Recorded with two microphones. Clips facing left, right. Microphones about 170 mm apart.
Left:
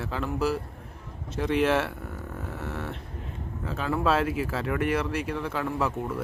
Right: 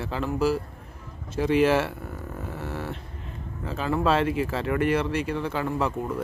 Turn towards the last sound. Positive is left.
turn(degrees=0)  # may be behind; listen again after turning